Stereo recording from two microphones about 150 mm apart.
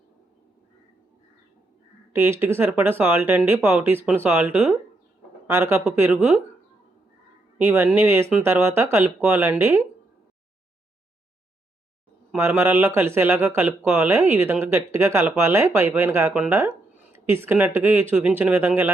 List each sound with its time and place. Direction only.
2.1 s speech: 15° right (ahead or behind)
7.6 s speech: 15° right (ahead or behind)
12.3 s speech: 15° right (ahead or behind)